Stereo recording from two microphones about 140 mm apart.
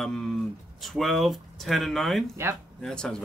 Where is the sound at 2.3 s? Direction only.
15° right (ahead or behind).